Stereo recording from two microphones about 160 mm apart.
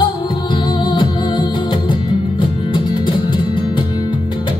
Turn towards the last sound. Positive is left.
turn(degrees=30)  # may be behind; listen again after turning